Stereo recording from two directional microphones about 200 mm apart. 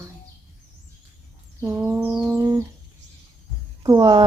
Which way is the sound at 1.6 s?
10° right (ahead or behind).